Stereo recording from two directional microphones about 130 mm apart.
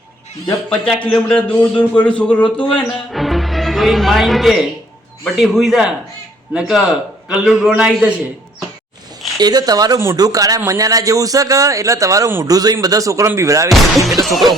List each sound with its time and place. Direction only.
0.7 s a man's voice: 5° left (ahead or behind)
9.4 s speech: 30° right (ahead or behind)
13.7 s a man's voice: centre (ahead or behind)